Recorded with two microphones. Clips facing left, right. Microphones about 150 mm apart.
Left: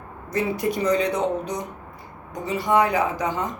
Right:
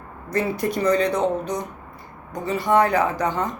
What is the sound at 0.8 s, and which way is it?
Speech, 15° left (ahead or behind).